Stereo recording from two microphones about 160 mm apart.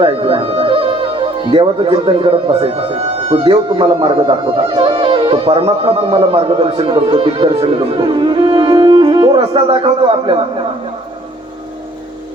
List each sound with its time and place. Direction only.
0.0 s speech: 35° right (ahead or behind)